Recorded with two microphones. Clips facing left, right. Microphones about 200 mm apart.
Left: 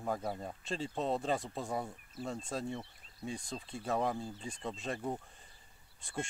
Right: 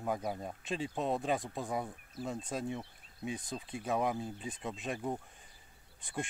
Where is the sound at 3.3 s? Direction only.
5° right (ahead or behind).